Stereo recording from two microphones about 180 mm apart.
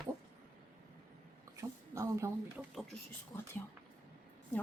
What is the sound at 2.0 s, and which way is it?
Speech, 15° right (ahead or behind).